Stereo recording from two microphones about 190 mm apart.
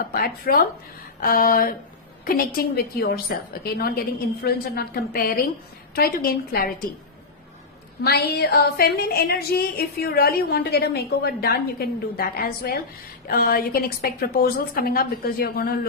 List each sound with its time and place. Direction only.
0.0 s a woman's voice: 50° left (ahead or behind)
8.0 s a woman's voice: 55° left (ahead or behind)